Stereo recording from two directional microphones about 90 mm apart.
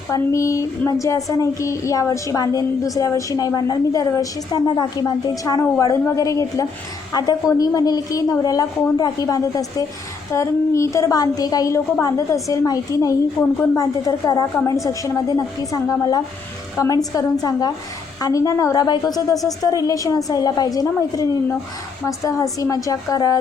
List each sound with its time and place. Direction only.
0.1 s speech: 35° left (ahead or behind)
13.4 s a woman's voice: 5° left (ahead or behind)
14.5 s a woman's voice: 30° left (ahead or behind)